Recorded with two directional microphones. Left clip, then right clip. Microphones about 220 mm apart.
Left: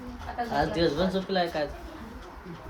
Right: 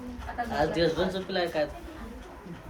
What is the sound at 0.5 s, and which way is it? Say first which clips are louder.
Speech: even; 45° left (ahead or behind).